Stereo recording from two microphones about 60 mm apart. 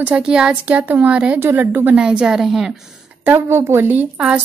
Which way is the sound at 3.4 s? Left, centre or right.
Right.